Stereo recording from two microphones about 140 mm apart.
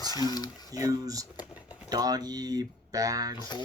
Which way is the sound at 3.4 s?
30° left (ahead or behind).